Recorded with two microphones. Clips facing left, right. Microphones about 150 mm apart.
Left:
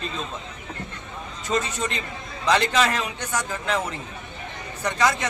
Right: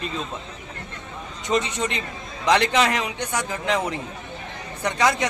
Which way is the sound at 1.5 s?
20° right (ahead or behind).